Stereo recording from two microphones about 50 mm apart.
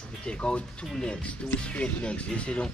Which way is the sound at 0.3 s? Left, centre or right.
Centre.